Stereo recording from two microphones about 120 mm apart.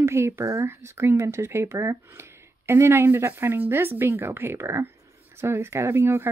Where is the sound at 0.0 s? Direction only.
20° right (ahead or behind).